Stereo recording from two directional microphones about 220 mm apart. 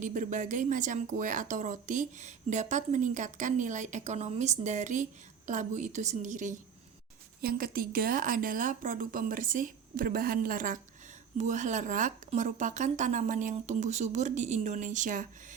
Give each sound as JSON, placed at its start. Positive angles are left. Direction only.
{"t": 0.0, "sound": "a woman's voice", "side_deg": -35}